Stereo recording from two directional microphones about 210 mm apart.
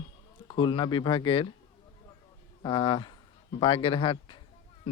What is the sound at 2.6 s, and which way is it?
Speech, 20° left (ahead or behind).